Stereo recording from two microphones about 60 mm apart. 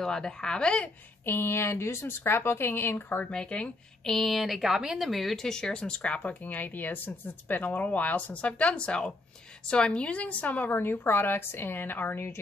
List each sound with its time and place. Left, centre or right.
0.0 s speech: centre
1.2 s a woman's voice: left
3.3 s speech: centre
4.1 s a woman's voice: centre; by 12.3 s left